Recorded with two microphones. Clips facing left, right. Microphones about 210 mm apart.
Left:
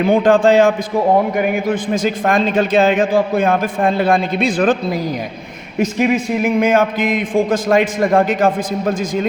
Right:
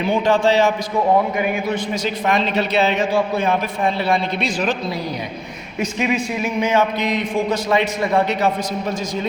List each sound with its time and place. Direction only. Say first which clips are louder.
0.0 s a man's voice: left 5 dB; 50° left (ahead or behind)